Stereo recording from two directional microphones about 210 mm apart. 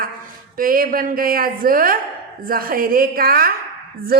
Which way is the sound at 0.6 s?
40° right (ahead or behind).